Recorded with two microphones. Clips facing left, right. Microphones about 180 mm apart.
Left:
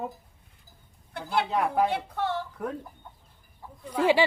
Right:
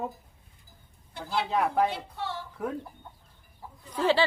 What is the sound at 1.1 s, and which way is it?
Speech, 55° left (ahead or behind).